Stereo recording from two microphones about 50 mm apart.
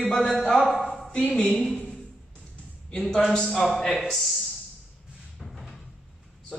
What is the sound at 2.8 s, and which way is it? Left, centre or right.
Speech, centre.